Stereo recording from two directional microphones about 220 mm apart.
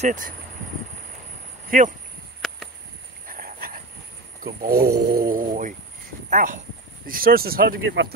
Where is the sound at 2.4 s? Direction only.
Centre (ahead or behind).